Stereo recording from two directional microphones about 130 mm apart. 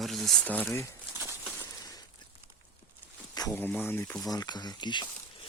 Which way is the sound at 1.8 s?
30° left (ahead or behind).